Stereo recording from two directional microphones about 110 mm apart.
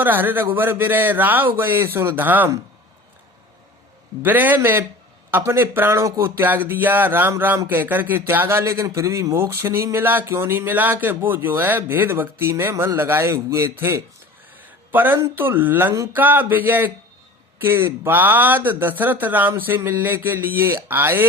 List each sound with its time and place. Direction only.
0.0 s speech: 20° right (ahead or behind)
4.2 s speech: 15° right (ahead or behind)